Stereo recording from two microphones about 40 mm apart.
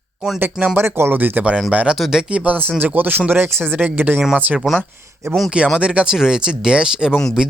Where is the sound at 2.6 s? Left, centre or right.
Right.